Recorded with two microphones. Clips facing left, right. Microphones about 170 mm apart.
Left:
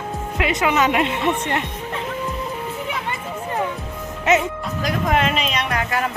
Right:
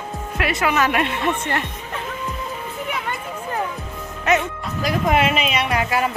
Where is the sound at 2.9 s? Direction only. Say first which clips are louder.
Even; centre (ahead or behind).